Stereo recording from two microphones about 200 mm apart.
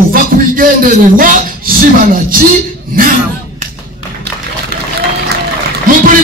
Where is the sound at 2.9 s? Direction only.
45° right (ahead or behind).